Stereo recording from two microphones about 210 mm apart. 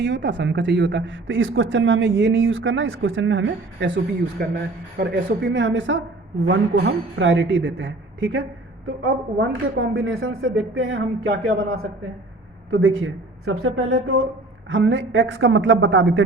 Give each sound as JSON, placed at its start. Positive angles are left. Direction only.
{"t": 0.0, "sound": "a woman's voice", "side_deg": -60}
{"t": 12.7, "sound": "speech", "side_deg": -70}
{"t": 14.7, "sound": "a woman's voice", "side_deg": -65}